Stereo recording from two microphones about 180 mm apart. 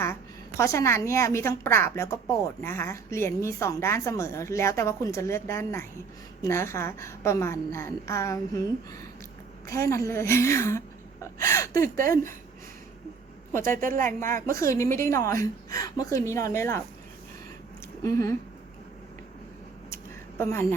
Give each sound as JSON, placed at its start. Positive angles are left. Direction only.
{"t": 0.0, "sound": "a woman's voice", "side_deg": 15}
{"t": 13.8, "sound": "speech", "side_deg": -50}
{"t": 14.1, "sound": "a woman's voice", "side_deg": 15}
{"t": 18.0, "sound": "a woman's voice", "side_deg": 15}
{"t": 20.4, "sound": "a woman's voice", "side_deg": 15}